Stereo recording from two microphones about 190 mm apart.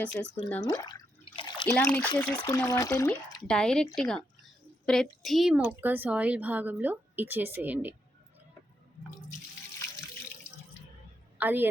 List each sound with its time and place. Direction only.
0.0 s speech: 10° left (ahead or behind)
0.6 s drip: 20° left (ahead or behind)
1.7 s speech: 5° left (ahead or behind)
3.4 s a woman's voice: 5° left (ahead or behind)
11.3 s a woman's voice: 10° right (ahead or behind)